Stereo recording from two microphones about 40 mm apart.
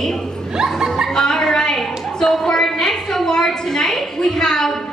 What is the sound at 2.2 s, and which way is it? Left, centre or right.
A woman's voice, centre.